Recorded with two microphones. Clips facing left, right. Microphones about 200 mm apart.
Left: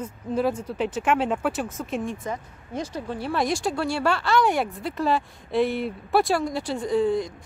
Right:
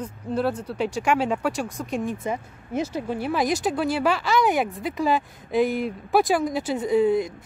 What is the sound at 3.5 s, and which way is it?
Speech, 20° right (ahead or behind).